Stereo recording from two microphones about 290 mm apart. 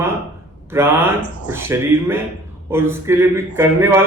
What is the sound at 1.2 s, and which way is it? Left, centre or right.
Speech, left.